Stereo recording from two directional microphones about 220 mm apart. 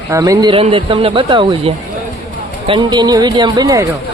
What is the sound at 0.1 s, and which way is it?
Speech, 15° right (ahead or behind).